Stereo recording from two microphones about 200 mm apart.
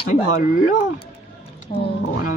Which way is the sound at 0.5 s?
40° left (ahead or behind).